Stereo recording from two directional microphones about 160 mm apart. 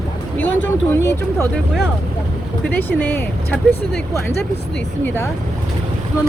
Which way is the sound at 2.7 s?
10° left (ahead or behind).